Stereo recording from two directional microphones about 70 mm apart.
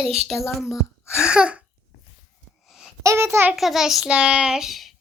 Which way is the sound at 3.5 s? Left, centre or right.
Centre.